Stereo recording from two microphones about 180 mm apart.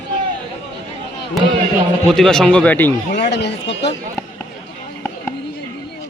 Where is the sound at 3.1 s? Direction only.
70° left (ahead or behind).